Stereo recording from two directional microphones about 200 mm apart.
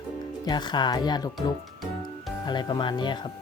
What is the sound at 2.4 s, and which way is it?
Speech, 20° left (ahead or behind).